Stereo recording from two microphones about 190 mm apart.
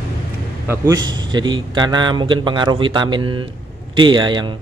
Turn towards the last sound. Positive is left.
turn(degrees=-25)  # may be behind; listen again after turning